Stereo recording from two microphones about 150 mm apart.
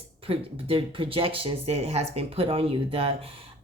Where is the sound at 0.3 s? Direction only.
35° right (ahead or behind).